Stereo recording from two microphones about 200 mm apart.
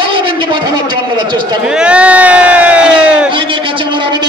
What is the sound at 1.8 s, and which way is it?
Speech, 5° right (ahead or behind).